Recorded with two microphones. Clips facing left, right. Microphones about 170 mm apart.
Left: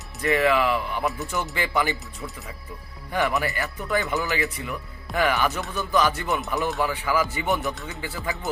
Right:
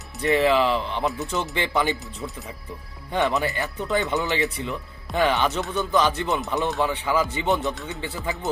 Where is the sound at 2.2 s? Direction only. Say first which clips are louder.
Right 3 dB; 5° right (ahead or behind).